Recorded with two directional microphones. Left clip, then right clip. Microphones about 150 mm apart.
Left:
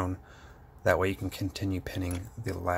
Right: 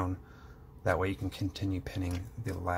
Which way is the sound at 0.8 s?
20° left (ahead or behind).